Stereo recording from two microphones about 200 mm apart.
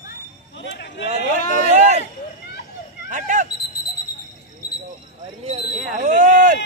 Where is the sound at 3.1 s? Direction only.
40° right (ahead or behind).